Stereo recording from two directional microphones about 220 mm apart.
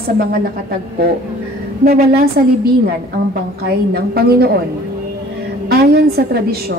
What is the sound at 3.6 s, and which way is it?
A woman's voice, 45° right (ahead or behind).